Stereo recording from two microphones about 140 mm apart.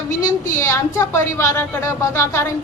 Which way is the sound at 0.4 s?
20° left (ahead or behind).